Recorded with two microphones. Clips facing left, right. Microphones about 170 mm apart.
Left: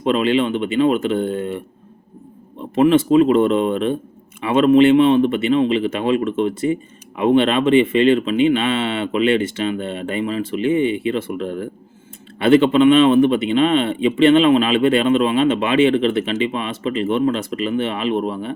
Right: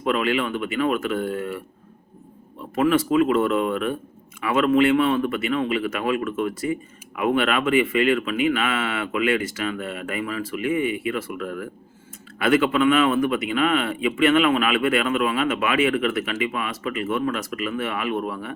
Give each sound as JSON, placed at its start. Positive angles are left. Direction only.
{"t": 0.0, "sound": "speech", "side_deg": 25}